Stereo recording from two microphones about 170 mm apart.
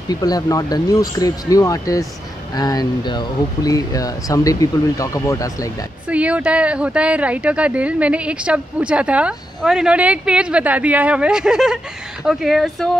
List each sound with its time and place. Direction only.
0.1 s speech: 20° left (ahead or behind)
6.0 s speech: 5° right (ahead or behind)